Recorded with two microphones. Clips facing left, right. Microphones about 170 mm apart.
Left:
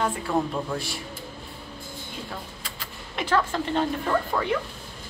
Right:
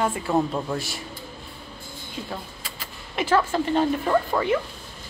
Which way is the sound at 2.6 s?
5° right (ahead or behind).